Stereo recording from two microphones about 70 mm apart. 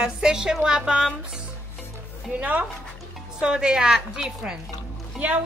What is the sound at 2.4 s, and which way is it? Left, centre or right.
Speech, right.